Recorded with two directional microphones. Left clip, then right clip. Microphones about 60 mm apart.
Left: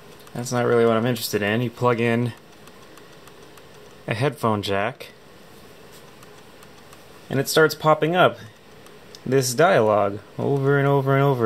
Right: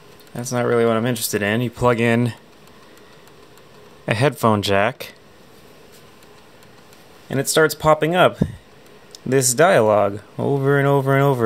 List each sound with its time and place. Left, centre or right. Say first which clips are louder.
0.3 s speech: right 1 dB; right
4.0 s speech: right 5 dB; right
7.2 s speech: right 1 dB; right